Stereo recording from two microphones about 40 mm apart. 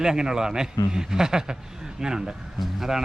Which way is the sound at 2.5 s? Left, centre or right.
Centre.